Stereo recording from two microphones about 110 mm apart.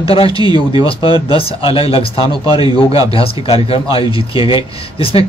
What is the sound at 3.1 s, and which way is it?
Speech, 55° left (ahead or behind).